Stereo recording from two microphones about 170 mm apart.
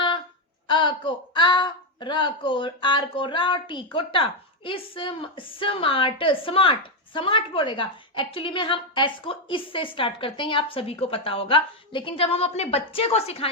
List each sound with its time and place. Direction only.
0.7 s a woman's voice: 30° left (ahead or behind)